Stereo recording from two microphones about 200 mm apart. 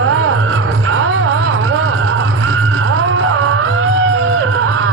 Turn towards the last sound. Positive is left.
turn(degrees=-90)